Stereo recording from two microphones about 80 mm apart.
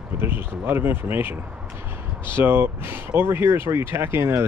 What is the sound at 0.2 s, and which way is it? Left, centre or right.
Speech, right.